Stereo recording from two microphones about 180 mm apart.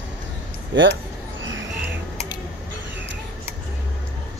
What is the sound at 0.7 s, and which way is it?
Speech, 90° right.